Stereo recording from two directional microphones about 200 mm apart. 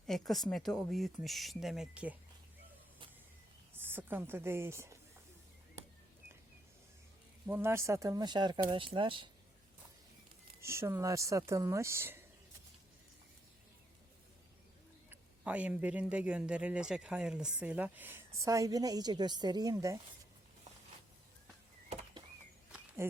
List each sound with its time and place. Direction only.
0.1 s speech: centre (ahead or behind)
3.8 s a woman's voice: 10° right (ahead or behind)
7.4 s a woman's voice: 10° right (ahead or behind)
10.6 s speech: 15° right (ahead or behind)
15.1 s a woman's voice: 5° right (ahead or behind)